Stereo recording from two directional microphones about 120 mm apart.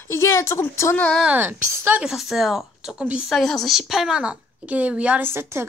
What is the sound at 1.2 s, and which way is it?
Speech, 15° right (ahead or behind).